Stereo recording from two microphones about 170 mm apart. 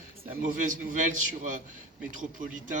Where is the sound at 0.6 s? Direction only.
50° right (ahead or behind).